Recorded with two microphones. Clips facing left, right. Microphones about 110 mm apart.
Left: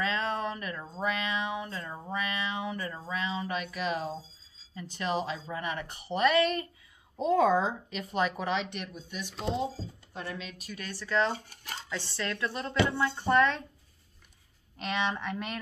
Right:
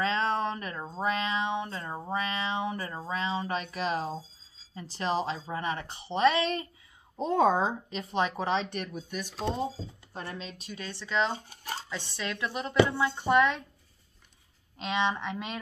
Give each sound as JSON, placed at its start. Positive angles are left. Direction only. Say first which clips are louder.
{"t": 0.0, "sound": "a sound", "louder": "right 3 dB", "side_deg": -30}
{"t": 0.9, "sound": "cat", "louder": "right 2 dB", "side_deg": -30}
{"t": 4.7, "sound": "speech", "louder": "right 2 dB", "side_deg": -35}
{"t": 10.1, "sound": "speech", "louder": "even", "side_deg": -30}
{"t": 11.3, "sound": "speech", "louder": "right 4 dB", "side_deg": -35}
{"t": 11.9, "sound": "a woman's voice", "louder": "left 5 dB", "side_deg": -15}
{"t": 14.8, "sound": "a woman's voice", "louder": "right 2 dB", "side_deg": -15}